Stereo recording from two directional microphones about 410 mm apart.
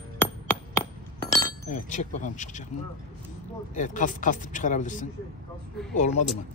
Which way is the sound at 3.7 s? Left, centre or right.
Centre.